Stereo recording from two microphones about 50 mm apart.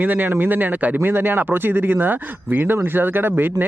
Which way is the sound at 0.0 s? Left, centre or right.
Right.